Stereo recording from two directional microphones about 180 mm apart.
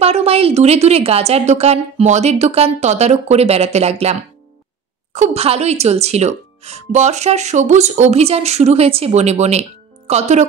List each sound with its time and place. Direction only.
0.0 s speech: 35° right (ahead or behind)